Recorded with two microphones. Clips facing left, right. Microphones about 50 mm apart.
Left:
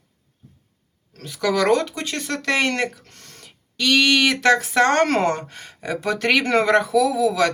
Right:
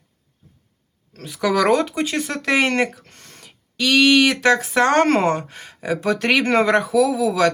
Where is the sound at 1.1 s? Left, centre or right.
Centre.